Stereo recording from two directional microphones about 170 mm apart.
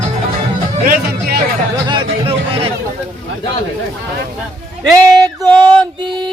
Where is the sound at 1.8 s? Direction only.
30° right (ahead or behind).